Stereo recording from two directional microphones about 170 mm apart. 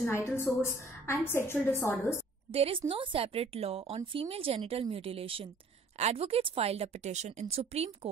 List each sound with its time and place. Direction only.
0.0 s a woman's voice: 15° left (ahead or behind)
2.5 s a woman's voice: 35° right (ahead or behind)